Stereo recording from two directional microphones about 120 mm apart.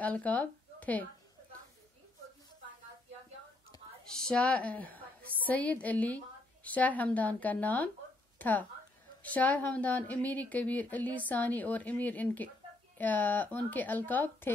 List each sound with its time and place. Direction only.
0.0 s speech: 15° left (ahead or behind)
3.7 s whispering: 35° left (ahead or behind)
4.1 s a woman's voice: 5° left (ahead or behind)